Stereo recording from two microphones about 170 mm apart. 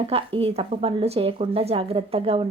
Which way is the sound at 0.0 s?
30° right (ahead or behind).